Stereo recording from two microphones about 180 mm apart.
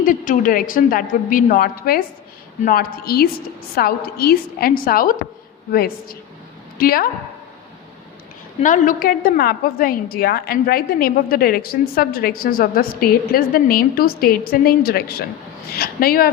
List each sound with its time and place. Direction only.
0.0 s a woman's voice: 50° left (ahead or behind)
8.6 s a woman's voice: 45° left (ahead or behind)